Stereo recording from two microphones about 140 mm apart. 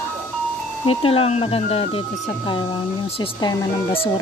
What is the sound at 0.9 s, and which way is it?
Speech, 40° left (ahead or behind).